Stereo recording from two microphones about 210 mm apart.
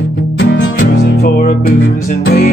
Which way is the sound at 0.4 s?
50° left (ahead or behind).